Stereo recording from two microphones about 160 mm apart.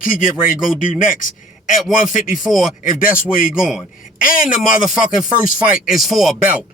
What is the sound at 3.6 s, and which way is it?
Speech, 5° right (ahead or behind).